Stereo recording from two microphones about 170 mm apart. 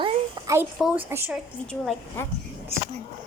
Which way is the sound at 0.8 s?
10° right (ahead or behind).